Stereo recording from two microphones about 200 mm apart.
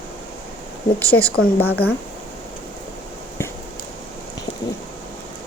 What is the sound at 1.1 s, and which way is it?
Speech, 70° left (ahead or behind).